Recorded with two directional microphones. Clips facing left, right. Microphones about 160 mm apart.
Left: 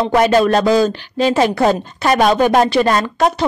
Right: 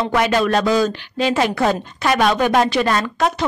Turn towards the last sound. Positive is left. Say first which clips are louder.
# left 4 dB
turn(degrees=35)  # may be behind; listen again after turning